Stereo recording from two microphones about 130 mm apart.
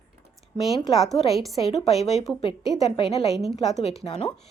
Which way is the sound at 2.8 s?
50° left (ahead or behind).